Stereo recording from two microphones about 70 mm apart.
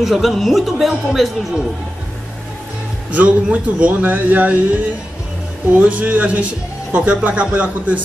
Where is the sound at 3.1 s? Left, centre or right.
Centre.